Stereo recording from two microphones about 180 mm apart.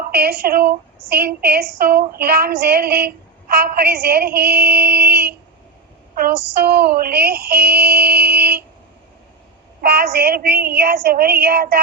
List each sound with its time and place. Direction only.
0.1 s a woman's voice: 60° right (ahead or behind)
9.8 s a woman's voice: 60° right (ahead or behind)